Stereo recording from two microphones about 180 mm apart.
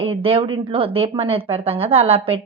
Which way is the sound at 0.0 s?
30° right (ahead or behind).